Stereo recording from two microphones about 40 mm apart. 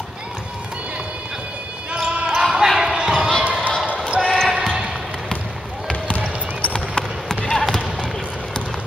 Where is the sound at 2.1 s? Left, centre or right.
Right.